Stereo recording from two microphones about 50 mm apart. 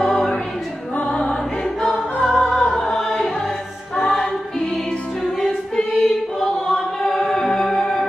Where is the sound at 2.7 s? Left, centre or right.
Centre.